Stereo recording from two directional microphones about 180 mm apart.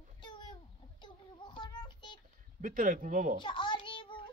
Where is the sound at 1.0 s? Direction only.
25° left (ahead or behind).